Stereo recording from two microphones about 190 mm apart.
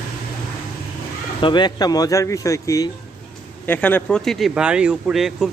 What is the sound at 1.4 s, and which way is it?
Speech, 25° left (ahead or behind).